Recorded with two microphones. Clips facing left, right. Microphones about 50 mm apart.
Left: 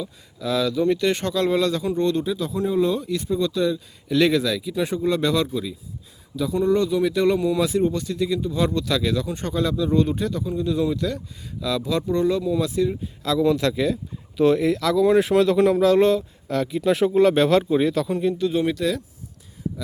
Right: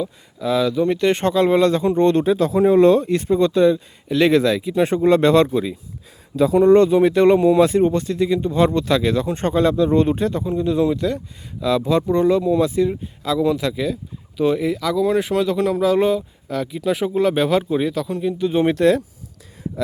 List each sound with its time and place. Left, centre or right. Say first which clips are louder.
0.0 s speech: right 5 dB; right
6.3 s speech: right 8 dB; right; by 18.3 s centre
18.7 s speech: right 8 dB; right